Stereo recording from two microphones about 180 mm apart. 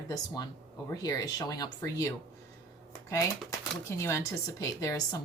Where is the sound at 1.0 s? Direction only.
20° left (ahead or behind).